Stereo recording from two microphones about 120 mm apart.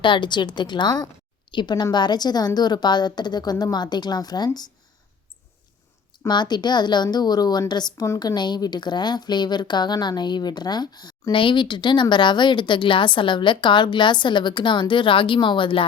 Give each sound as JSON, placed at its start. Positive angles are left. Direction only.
{"t": 0.0, "sound": "a woman's voice", "side_deg": 40}
{"t": 6.2, "sound": "a woman's voice", "side_deg": 35}